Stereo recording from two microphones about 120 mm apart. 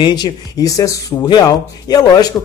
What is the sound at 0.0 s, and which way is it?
Speech, 35° left (ahead or behind).